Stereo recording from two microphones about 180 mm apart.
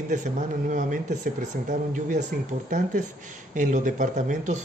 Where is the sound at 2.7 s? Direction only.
45° right (ahead or behind).